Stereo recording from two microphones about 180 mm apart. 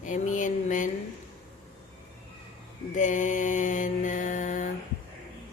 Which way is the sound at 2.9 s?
45° left (ahead or behind).